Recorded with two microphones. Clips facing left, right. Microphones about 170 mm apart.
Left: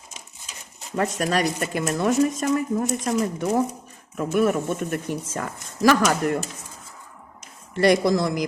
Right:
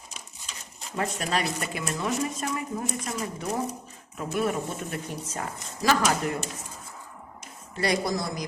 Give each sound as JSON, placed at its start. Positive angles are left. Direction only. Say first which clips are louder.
{"t": 0.9, "sound": "speech", "louder": "left 5 dB", "side_deg": 50}
{"t": 7.9, "sound": "speech", "louder": "left 8 dB", "side_deg": 90}